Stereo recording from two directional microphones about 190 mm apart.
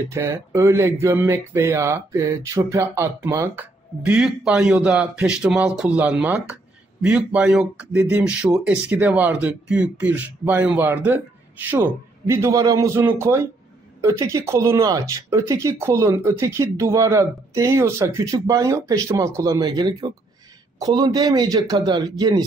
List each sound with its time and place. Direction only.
0.1 s speech: 15° right (ahead or behind)